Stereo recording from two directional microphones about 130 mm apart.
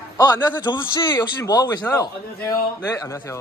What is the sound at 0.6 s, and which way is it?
A man's voice, 35° left (ahead or behind).